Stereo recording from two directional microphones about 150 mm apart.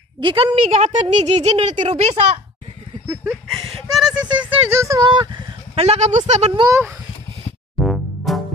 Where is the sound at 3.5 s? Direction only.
Centre (ahead or behind).